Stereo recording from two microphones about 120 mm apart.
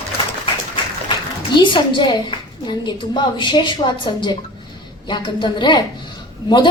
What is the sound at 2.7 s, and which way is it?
Speech, 40° left (ahead or behind).